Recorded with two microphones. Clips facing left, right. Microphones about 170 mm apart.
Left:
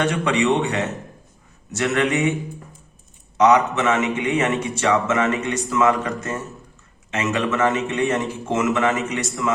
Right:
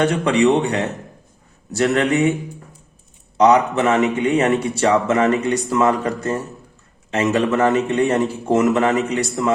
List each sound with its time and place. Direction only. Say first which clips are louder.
0.0 s a man's voice: right 4 dB; 35° right (ahead or behind)
3.3 s a man's voice: right 2 dB; 30° right (ahead or behind)